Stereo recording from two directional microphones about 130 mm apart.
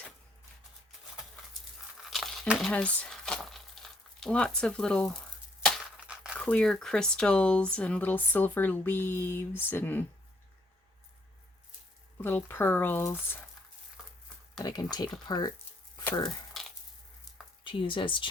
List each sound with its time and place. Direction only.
2.0 s a sound: centre (ahead or behind)
2.5 s speech: centre (ahead or behind)
6.1 s crumpling: 5° right (ahead or behind)
6.4 s speech: 10° left (ahead or behind)
12.1 s speech: 15° left (ahead or behind)
14.6 s speech: 30° left (ahead or behind)
16.6 s wood: centre (ahead or behind)
17.6 s speech: 40° left (ahead or behind)